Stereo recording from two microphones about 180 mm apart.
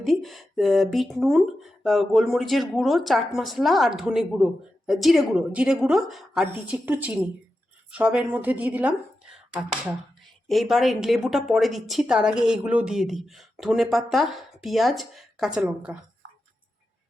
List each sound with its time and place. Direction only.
0.0 s speech: centre (ahead or behind)